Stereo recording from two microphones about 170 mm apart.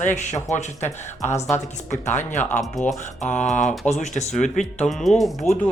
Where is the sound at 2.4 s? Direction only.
10° left (ahead or behind).